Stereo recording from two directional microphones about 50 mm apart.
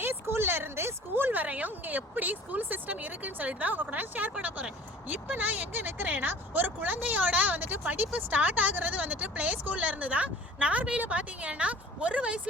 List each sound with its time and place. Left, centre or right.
0.0 s a woman's voice: right